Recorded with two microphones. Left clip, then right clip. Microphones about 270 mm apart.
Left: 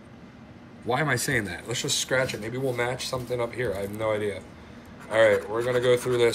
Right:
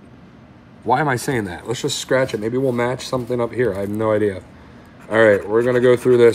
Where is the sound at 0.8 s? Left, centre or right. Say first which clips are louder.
Right 8 dB; centre.